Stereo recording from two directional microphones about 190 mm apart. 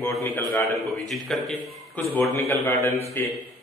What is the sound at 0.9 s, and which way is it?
A man's voice, centre (ahead or behind).